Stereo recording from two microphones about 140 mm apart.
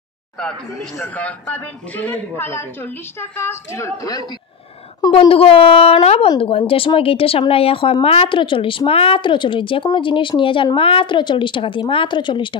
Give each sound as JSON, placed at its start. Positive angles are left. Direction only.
{"t": 0.7, "sound": "a man's voice", "side_deg": 20}
{"t": 5.1, "sound": "speech", "side_deg": 40}